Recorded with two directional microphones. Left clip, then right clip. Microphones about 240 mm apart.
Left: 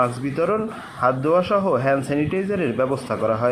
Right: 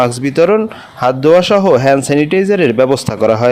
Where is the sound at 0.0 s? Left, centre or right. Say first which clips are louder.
Right 10 dB; right.